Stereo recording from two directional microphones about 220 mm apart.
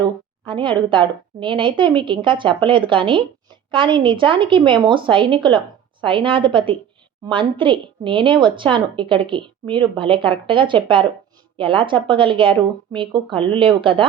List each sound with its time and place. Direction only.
0.4 s a woman's voice: 20° right (ahead or behind)